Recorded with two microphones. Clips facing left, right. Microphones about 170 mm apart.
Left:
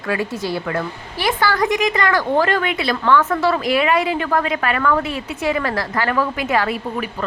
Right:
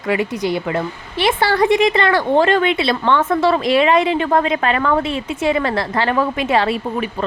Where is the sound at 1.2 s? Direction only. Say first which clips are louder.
Right 3 dB; 30° right (ahead or behind).